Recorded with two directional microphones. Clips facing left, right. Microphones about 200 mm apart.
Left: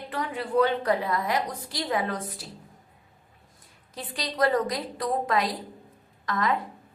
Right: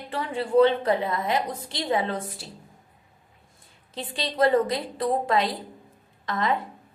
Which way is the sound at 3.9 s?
25° right (ahead or behind).